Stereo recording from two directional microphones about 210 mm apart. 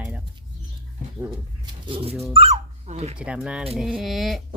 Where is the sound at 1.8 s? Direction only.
25° right (ahead or behind).